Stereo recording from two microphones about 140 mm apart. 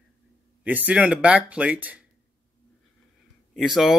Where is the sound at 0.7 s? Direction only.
10° right (ahead or behind).